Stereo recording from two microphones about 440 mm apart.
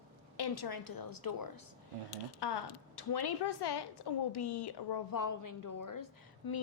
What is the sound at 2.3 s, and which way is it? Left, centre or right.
A woman's voice, left.